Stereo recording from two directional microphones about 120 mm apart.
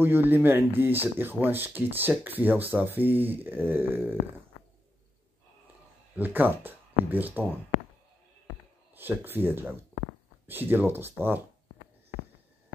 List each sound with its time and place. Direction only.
0.0 s speech: 15° right (ahead or behind)
6.1 s speech: 15° right (ahead or behind)
8.9 s speech: 15° right (ahead or behind)